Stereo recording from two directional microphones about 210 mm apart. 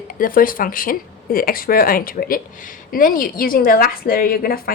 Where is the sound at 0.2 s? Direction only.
40° left (ahead or behind).